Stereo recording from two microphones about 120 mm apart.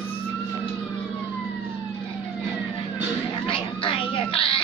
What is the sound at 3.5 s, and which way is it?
Cat, 50° left (ahead or behind).